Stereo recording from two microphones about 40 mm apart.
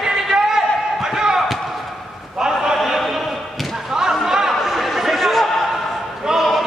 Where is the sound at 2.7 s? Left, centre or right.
Centre.